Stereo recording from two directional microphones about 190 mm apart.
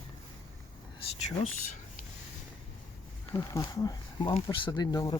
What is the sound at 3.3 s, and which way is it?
Speech, 15° left (ahead or behind).